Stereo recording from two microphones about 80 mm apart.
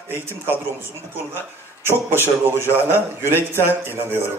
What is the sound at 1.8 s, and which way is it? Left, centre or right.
Speech, right.